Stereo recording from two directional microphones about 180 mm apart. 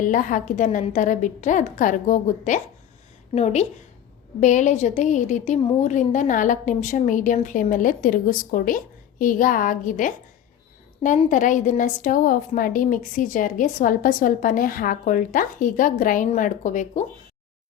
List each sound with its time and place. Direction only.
0.0 s a woman's voice: 45° left (ahead or behind)
11.3 s a woman's voice: 45° left (ahead or behind)